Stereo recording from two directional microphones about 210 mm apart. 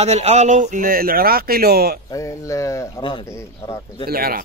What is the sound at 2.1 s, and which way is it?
Speech, 15° left (ahead or behind).